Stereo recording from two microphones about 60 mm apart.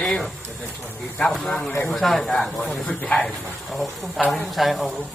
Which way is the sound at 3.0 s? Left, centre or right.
Left.